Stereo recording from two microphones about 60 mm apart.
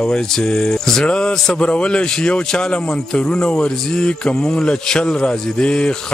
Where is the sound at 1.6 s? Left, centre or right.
Centre.